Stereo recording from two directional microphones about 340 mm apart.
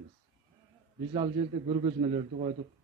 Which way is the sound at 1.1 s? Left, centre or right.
Centre.